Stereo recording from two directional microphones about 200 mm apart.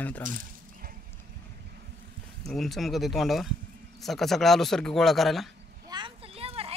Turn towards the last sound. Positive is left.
turn(degrees=-30)  # may be behind; listen again after turning